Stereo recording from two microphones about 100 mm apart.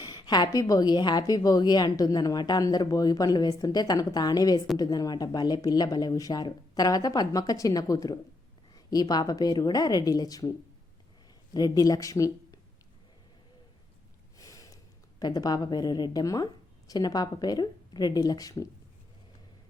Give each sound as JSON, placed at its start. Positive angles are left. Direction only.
{"t": 0.0, "sound": "a woman's voice", "side_deg": 45}
{"t": 11.5, "sound": "a woman's voice", "side_deg": 40}
{"t": 14.3, "sound": "snort", "side_deg": 35}
{"t": 15.2, "sound": "a woman's voice", "side_deg": 40}